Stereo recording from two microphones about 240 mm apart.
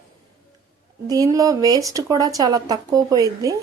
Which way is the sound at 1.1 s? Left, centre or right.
Centre.